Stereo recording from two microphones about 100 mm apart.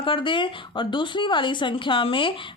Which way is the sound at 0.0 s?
55° left (ahead or behind).